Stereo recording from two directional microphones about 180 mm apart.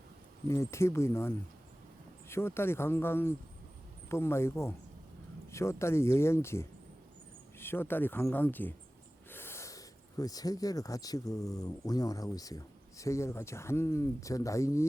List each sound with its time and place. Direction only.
0.4 s speech: 15° left (ahead or behind)
2.3 s speech: 15° left (ahead or behind)